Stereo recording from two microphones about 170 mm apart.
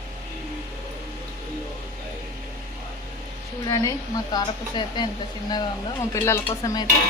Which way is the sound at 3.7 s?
20° left (ahead or behind).